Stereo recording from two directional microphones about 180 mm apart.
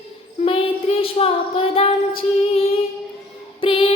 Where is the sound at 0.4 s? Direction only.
30° left (ahead or behind).